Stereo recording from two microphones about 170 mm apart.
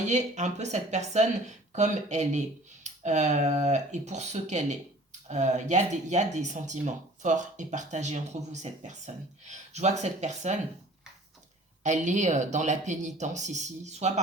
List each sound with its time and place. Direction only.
0.0 s speech: 45° right (ahead or behind)
11.8 s speech: 45° right (ahead or behind)